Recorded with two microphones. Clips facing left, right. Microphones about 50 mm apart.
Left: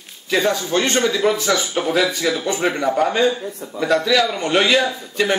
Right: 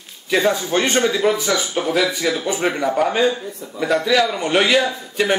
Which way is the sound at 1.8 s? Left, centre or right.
Centre.